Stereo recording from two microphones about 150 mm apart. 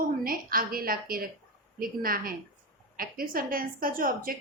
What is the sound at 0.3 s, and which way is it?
A woman's voice, 75° right (ahead or behind).